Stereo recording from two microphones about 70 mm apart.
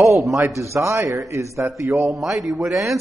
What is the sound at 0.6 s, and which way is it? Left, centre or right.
A man's voice, right.